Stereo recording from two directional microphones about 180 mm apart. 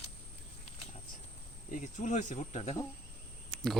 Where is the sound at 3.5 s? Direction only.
Centre (ahead or behind).